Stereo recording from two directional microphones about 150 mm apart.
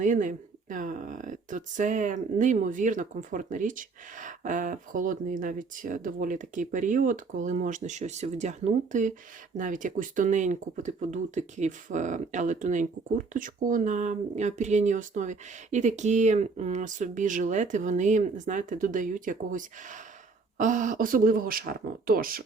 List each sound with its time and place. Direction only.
0.0 s speech: 55° right (ahead or behind)